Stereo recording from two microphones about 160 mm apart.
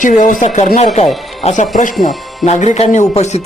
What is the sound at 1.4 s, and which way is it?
Speech, 45° left (ahead or behind).